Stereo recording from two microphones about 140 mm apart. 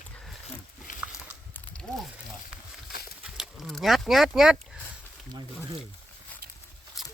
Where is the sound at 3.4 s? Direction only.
Centre (ahead or behind).